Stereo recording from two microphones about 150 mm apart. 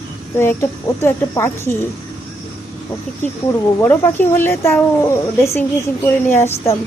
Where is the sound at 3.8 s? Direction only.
15° left (ahead or behind).